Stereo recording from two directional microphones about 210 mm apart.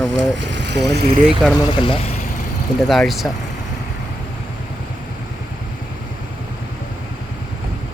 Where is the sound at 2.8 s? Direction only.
Centre (ahead or behind).